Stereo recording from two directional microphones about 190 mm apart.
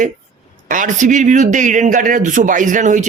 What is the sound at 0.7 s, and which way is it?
A man's voice, 45° right (ahead or behind).